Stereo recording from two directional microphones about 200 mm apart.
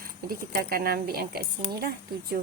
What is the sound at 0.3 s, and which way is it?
A woman's voice, 50° right (ahead or behind).